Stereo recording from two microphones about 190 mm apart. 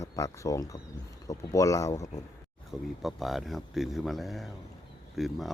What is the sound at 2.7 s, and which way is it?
Speech, centre (ahead or behind).